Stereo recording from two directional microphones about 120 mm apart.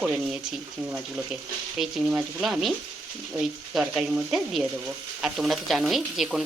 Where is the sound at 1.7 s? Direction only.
5° right (ahead or behind).